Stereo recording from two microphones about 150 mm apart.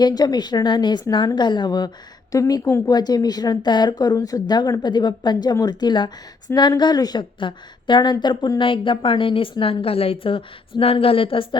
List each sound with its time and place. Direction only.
0.0 s a woman's voice: 25° left (ahead or behind)